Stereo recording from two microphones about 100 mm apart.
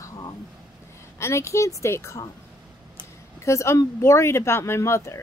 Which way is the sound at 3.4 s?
30° left (ahead or behind).